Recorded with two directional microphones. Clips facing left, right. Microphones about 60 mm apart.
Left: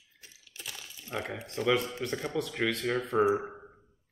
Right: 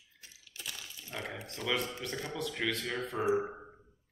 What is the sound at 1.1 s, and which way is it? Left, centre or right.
Speech, left.